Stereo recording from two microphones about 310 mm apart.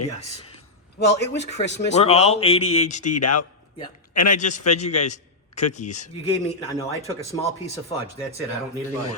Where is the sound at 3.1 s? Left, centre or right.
Left.